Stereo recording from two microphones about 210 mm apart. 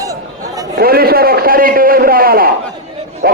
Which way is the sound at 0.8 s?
45° right (ahead or behind).